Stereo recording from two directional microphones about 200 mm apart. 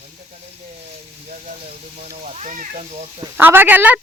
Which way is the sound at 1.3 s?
35° right (ahead or behind).